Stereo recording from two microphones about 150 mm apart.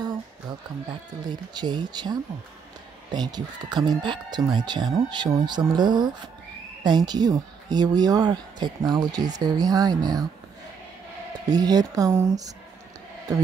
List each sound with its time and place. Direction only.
1.2 s speech: 30° right (ahead or behind)
11.4 s speech: 25° right (ahead or behind)